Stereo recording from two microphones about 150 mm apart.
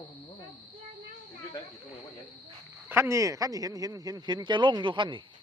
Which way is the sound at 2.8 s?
15° right (ahead or behind).